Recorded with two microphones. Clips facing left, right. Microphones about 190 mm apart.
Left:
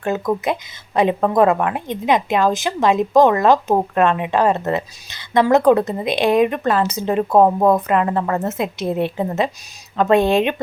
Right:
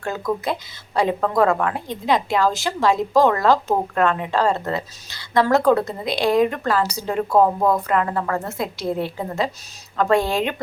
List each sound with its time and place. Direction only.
0.0 s a woman's voice: 20° left (ahead or behind)